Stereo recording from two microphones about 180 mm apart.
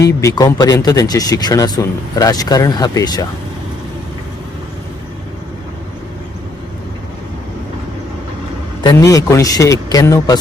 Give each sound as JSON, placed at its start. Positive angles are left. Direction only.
{"t": 0.2, "sound": "speech", "side_deg": 20}
{"t": 8.8, "sound": "speech", "side_deg": 20}